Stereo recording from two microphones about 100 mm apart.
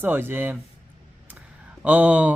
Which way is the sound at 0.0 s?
20° right (ahead or behind).